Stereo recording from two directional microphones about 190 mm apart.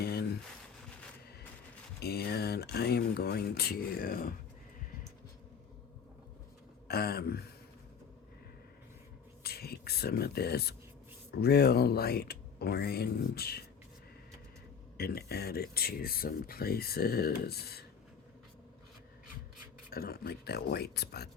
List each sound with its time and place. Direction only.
0.0 s a sound: 55° left (ahead or behind)
2.0 s speech: 55° left (ahead or behind)
6.8 s speech: 55° left (ahead or behind)
9.4 s speech: 55° left (ahead or behind)
14.9 s speech: 55° left (ahead or behind)
19.9 s speech: 50° left (ahead or behind)